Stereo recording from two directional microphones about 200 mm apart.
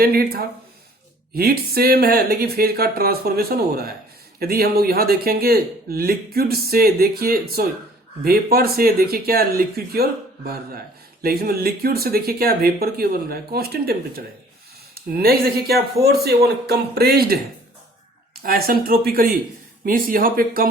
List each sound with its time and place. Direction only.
0.0 s speech: 50° right (ahead or behind)
14.9 s speech: 50° right (ahead or behind)
18.4 s speech: 50° right (ahead or behind)